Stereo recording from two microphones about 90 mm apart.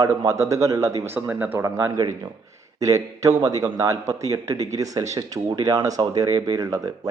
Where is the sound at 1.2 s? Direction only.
15° right (ahead or behind).